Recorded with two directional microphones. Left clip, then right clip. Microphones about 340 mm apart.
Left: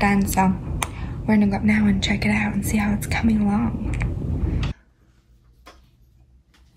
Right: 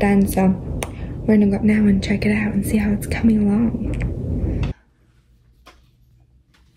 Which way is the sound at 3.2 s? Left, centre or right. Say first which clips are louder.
Right 6 dB; centre.